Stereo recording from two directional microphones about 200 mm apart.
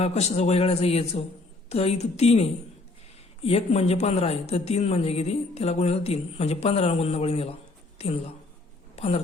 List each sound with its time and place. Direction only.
0.0 s speech: 35° left (ahead or behind)
9.0 s speech: 30° left (ahead or behind)